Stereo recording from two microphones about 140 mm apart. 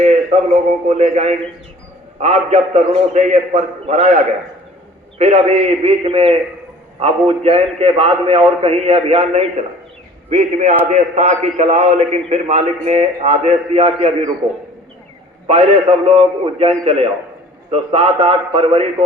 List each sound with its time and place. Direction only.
0.0 s a man's voice: 55° right (ahead or behind)
15.4 s a man's voice: 45° right (ahead or behind)